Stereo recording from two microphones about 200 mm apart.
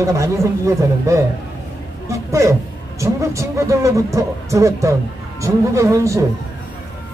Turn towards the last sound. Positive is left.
turn(degrees=-15)  # may be behind; listen again after turning